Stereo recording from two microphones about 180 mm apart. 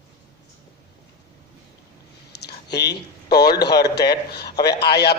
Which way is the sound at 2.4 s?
65° left (ahead or behind).